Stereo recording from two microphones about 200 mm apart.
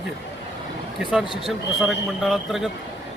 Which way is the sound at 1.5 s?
Centre (ahead or behind).